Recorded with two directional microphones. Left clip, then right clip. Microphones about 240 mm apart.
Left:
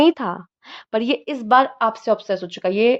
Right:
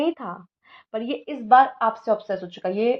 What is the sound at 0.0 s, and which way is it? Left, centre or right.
A woman's voice, left.